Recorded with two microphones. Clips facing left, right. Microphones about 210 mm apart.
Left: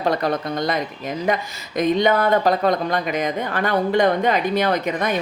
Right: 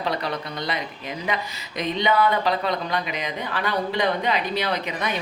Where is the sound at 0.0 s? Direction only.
45° left (ahead or behind).